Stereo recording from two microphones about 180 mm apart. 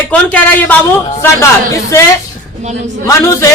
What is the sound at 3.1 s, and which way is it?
Speech, 15° left (ahead or behind).